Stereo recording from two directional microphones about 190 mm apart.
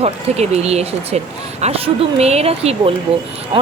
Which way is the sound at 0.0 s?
35° right (ahead or behind).